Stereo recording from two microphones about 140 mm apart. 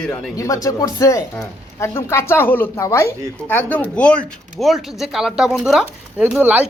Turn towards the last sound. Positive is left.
turn(degrees=-10)  # may be behind; listen again after turning